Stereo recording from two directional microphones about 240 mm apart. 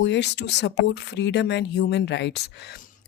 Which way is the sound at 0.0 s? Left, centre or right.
Left.